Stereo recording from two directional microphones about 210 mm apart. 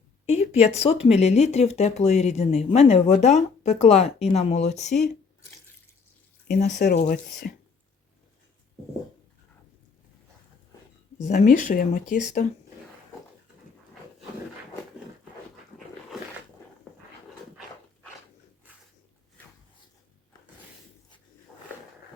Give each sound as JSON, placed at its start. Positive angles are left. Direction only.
{"t": 0.3, "sound": "speech", "side_deg": 30}
{"t": 6.6, "sound": "speech", "side_deg": 35}
{"t": 6.8, "sound": "speech", "side_deg": 50}
{"t": 11.2, "sound": "speech", "side_deg": 35}